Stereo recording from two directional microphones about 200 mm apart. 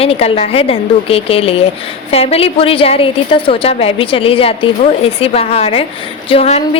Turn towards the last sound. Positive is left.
turn(degrees=30)  # may be behind; listen again after turning